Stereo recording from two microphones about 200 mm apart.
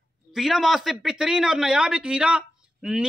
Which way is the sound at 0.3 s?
Centre (ahead or behind).